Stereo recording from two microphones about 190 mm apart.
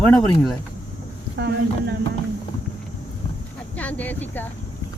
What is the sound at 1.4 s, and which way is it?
Speech, 60° right (ahead or behind).